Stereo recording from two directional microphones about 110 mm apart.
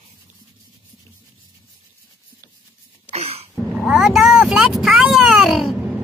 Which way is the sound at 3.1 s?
65° right (ahead or behind).